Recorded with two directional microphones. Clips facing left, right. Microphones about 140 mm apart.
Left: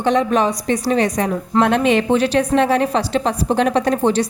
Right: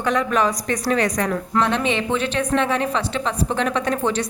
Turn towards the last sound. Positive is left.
turn(degrees=35)  # may be behind; listen again after turning